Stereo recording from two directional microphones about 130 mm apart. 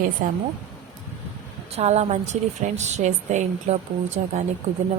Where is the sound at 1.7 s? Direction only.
55° right (ahead or behind).